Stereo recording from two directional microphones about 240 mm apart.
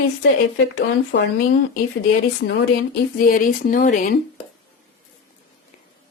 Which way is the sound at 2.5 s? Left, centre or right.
Left.